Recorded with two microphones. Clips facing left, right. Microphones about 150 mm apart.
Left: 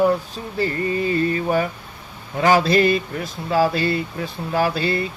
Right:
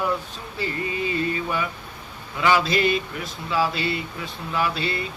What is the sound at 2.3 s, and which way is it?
Speech, 45° left (ahead or behind).